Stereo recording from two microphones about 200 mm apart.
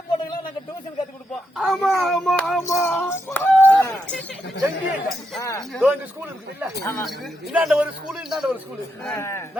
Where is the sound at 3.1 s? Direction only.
10° left (ahead or behind).